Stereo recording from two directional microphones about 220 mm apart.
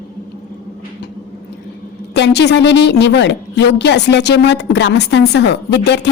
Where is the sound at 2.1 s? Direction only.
50° left (ahead or behind).